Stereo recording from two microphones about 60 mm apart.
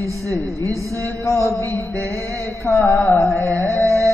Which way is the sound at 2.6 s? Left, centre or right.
Left.